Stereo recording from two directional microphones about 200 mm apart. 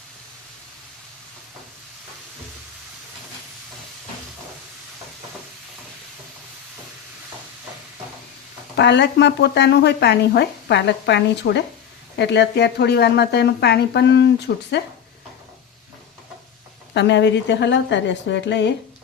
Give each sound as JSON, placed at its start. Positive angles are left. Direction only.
{"t": 8.7, "sound": "speech", "side_deg": 60}
{"t": 16.9, "sound": "speech", "side_deg": 60}